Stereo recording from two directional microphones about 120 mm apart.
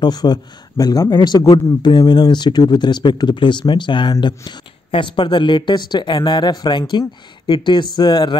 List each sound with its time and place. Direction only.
0.0 s speech: 35° left (ahead or behind)